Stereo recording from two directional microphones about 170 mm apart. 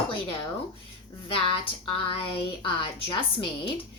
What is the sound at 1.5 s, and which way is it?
A woman's voice, 30° left (ahead or behind).